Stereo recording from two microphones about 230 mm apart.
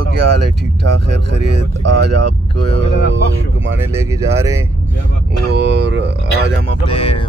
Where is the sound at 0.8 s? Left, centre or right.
Right.